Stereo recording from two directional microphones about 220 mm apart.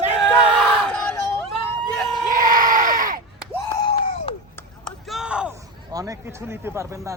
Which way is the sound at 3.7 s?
20° left (ahead or behind).